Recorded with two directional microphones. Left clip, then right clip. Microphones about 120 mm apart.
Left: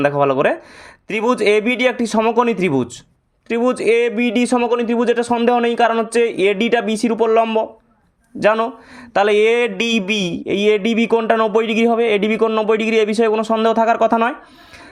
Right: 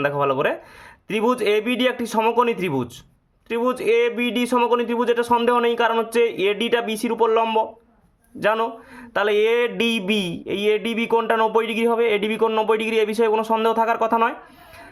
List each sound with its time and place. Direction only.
0.0 s speech: 40° left (ahead or behind)